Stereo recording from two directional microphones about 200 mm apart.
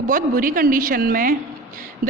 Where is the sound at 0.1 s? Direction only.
45° right (ahead or behind).